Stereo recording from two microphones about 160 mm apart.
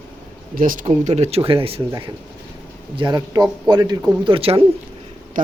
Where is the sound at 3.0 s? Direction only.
25° right (ahead or behind).